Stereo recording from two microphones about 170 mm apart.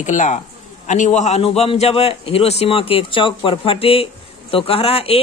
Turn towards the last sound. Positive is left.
turn(degrees=35)  # may be behind; listen again after turning